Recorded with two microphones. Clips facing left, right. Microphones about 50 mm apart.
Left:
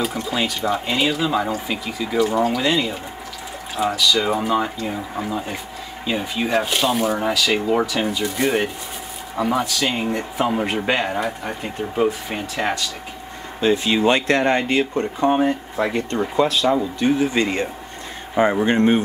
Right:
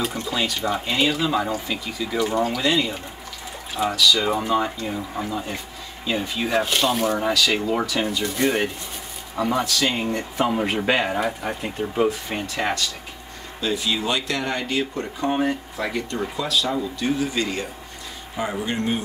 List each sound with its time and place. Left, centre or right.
0.0 s speech: centre
13.6 s speech: left